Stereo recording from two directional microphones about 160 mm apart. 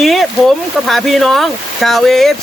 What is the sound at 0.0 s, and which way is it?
Speech, centre (ahead or behind).